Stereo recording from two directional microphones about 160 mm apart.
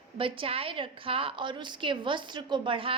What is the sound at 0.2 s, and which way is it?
A woman's voice, 35° right (ahead or behind).